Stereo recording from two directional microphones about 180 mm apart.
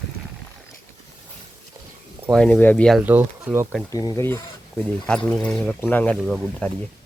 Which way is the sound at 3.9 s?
20° left (ahead or behind).